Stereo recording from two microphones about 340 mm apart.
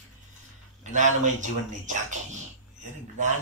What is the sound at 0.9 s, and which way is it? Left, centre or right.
Speech, right.